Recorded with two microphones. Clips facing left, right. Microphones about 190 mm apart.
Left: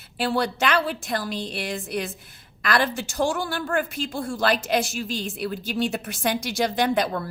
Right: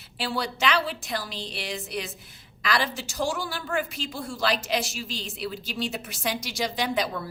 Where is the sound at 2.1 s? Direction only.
Centre (ahead or behind).